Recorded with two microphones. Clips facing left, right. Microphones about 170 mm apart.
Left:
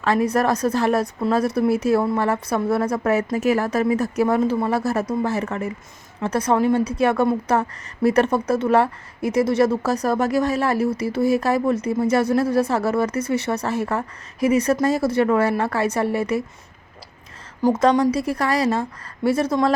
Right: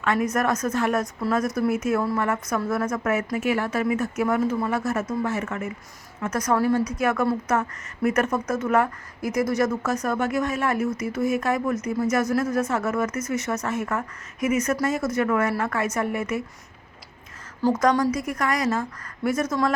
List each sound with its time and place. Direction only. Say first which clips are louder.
0.0 s a woman's voice: left 4 dB; 35° left (ahead or behind)
17.6 s a woman's voice: left 3 dB; 15° left (ahead or behind)
18.1 s a woman's voice: left 4 dB; 30° left (ahead or behind)